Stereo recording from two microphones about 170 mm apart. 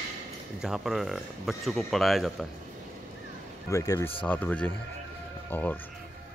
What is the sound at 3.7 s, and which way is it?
Speech, 20° left (ahead or behind).